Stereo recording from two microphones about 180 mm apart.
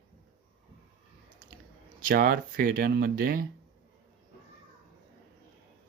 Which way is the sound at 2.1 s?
55° right (ahead or behind).